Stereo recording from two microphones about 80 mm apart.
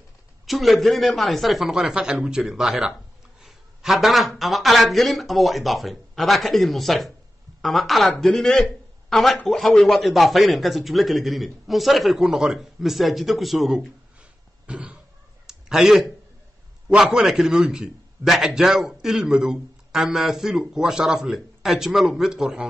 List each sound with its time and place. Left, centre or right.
0.5 s a man's voice: centre
15.4 s a sound: centre
16.9 s a man's voice: centre